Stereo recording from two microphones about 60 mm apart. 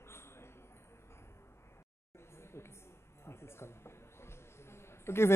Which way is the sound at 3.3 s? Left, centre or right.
Left.